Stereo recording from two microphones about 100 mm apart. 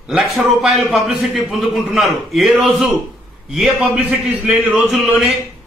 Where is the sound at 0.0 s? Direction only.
Centre (ahead or behind).